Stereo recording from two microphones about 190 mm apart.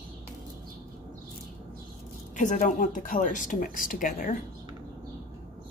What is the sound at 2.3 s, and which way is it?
Speech, 40° left (ahead or behind).